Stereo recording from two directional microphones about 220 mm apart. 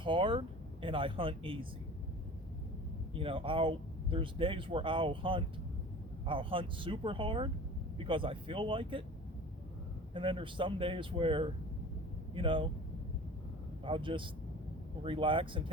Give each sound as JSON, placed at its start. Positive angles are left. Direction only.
{"t": 0.0, "sound": "speech", "side_deg": -25}
{"t": 3.2, "sound": "speech", "side_deg": -25}
{"t": 10.2, "sound": "speech", "side_deg": -25}
{"t": 13.8, "sound": "speech", "side_deg": -25}